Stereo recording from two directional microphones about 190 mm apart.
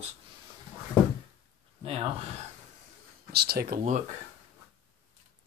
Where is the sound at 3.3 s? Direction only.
55° right (ahead or behind).